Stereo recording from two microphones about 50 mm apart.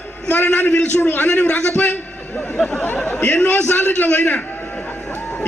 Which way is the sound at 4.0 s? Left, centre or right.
Left.